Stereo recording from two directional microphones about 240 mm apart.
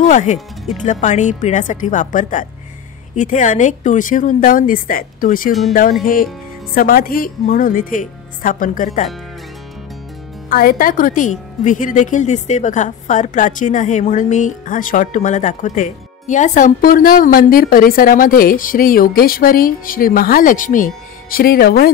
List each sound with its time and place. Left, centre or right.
0.0 s speech: left
10.5 s speech: left